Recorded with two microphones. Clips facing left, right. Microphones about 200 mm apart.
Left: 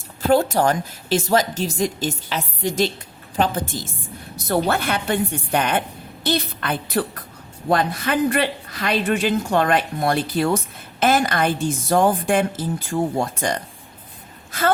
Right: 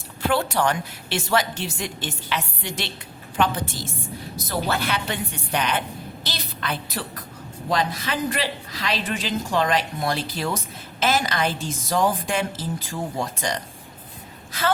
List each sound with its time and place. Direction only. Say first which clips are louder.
0.3 s a woman's voice: left 5 dB; 45° left (ahead or behind)
4.4 s a woman's voice: left 5 dB; 55° left (ahead or behind)